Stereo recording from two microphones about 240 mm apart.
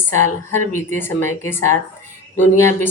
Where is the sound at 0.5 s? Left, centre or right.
Right.